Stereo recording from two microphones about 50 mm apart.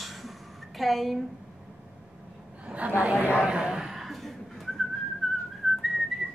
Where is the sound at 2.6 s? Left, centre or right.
Right.